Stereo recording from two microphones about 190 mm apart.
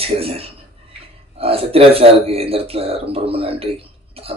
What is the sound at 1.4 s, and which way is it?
Speech, 30° right (ahead or behind).